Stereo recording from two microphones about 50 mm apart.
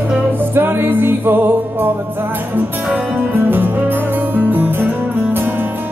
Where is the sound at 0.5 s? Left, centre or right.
Right.